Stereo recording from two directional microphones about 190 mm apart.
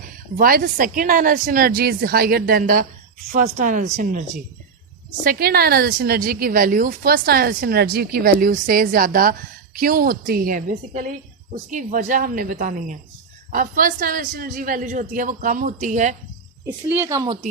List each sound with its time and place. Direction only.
0.3 s speech: 50° right (ahead or behind)
5.2 s speech: 50° right (ahead or behind)
16.9 s speech: 15° right (ahead or behind)